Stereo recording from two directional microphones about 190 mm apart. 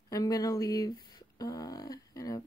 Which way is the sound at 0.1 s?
20° left (ahead or behind).